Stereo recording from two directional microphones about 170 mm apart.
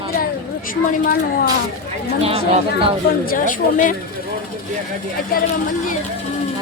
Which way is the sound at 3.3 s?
50° left (ahead or behind).